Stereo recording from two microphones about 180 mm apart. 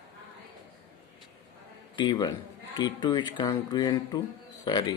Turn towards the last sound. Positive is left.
turn(degrees=20)  # may be behind; listen again after turning